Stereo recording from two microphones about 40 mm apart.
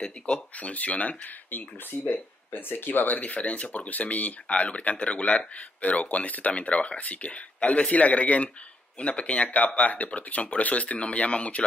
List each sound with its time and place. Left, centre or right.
0.0 s speech: left
1.5 s speech: left
3.2 s speech: left
4.5 s speech: left